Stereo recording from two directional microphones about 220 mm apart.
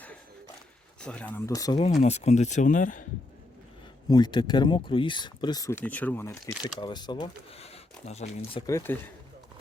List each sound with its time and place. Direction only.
1.0 s speech: 5° left (ahead or behind)
2.0 s speech: 30° left (ahead or behind)
4.1 s speech: 20° left (ahead or behind)
8.5 s speech: 15° left (ahead or behind)